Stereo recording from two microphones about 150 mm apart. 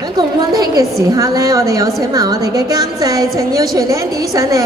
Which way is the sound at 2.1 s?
25° right (ahead or behind).